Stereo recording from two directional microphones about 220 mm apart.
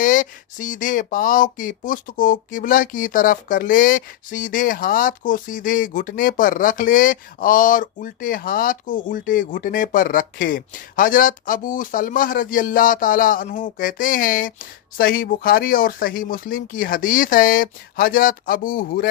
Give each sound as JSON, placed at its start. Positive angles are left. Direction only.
{"t": 0.0, "sound": "speech", "side_deg": 35}